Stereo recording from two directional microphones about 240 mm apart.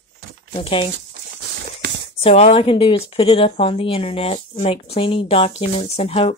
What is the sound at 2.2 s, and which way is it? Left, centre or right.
A woman's voice, left.